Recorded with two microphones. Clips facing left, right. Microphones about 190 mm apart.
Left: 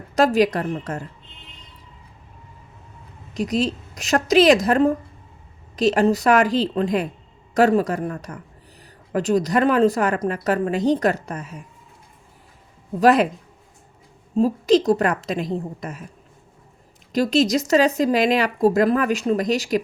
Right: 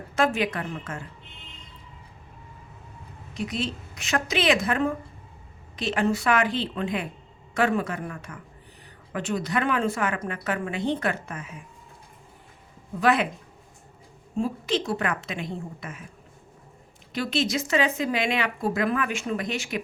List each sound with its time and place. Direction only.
0.2 s speech: 40° left (ahead or behind)
3.3 s speech: 40° left (ahead or behind)
13.0 s speech: 40° left (ahead or behind)
14.3 s speech: 40° left (ahead or behind)
17.1 s speech: 40° left (ahead or behind)